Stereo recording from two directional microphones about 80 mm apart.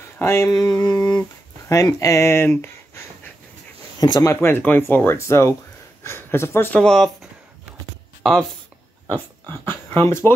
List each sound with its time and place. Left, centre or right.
0.2 s speech: left
0.5 s a sound: left
1.7 s speech: left
4.0 s speech: left
4.3 s speech: left
6.8 s speech: centre
8.2 s speech: centre
9.9 s speech: left